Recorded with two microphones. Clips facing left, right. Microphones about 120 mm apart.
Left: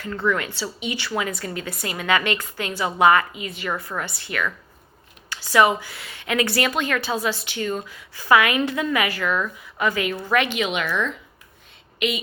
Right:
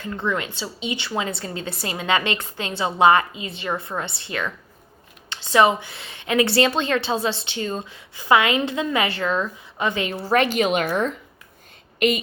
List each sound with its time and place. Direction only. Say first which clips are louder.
0.0 s a woman's voice: left 2 dB; 20° right (ahead or behind); by 12.2 s 45° right (ahead or behind)